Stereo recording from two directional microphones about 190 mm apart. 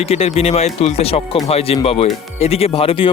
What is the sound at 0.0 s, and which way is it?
Speech, 30° left (ahead or behind).